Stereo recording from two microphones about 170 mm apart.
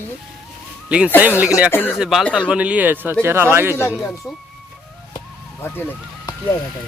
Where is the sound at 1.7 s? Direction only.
10° left (ahead or behind).